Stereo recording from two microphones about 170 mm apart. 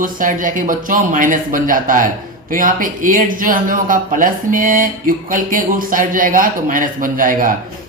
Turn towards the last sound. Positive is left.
turn(degrees=-55)  # may be behind; listen again after turning